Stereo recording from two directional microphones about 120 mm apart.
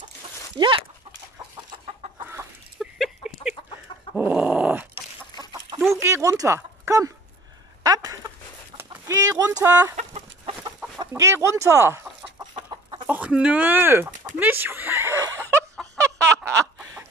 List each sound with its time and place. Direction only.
0.6 s speech: 45° right (ahead or behind)
1.9 s chicken: 55° right (ahead or behind)
2.8 s a sound: 5° right (ahead or behind)
4.2 s dog: 10° right (ahead or behind)
5.9 s a sound: 25° right (ahead or behind)
9.6 s speech: 30° right (ahead or behind)
9.9 s chicken: 60° right (ahead or behind)
10.8 s chicken: 15° right (ahead or behind)
11.1 s speech: 25° right (ahead or behind)
13.0 s a sound: 10° right (ahead or behind)